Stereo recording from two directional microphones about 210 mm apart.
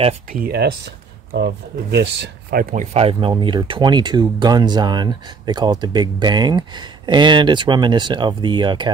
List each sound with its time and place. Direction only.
0.3 s speech: 45° right (ahead or behind); by 8.9 s 20° right (ahead or behind)